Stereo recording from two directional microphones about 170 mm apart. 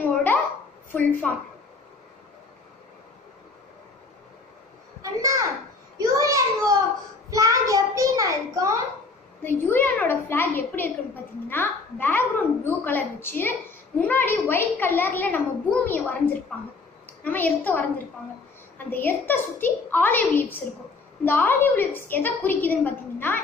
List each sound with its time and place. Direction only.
0.0 s a sound: 10° left (ahead or behind)
0.9 s a child's voice: 5° left (ahead or behind)
5.0 s a child's voice: 20° right (ahead or behind)
5.9 s a sound: 20° right (ahead or behind)
9.4 s a child's voice: 10° left (ahead or behind)
17.2 s a child's voice: 10° left (ahead or behind)